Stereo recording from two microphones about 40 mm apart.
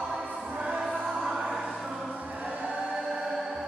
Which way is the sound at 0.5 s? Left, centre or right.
Right.